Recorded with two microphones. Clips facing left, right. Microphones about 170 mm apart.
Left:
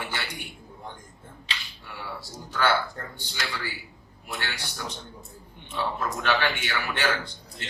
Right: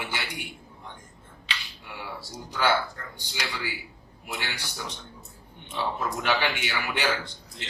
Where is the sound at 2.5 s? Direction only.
10° right (ahead or behind).